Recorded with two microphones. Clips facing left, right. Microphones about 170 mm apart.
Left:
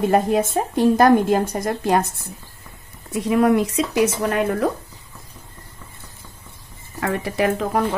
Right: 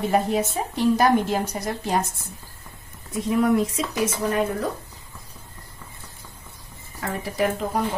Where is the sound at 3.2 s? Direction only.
80° left.